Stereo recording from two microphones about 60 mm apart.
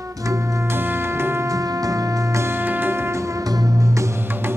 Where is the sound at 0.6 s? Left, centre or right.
Right.